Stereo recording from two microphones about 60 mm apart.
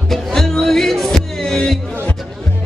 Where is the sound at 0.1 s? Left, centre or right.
Centre.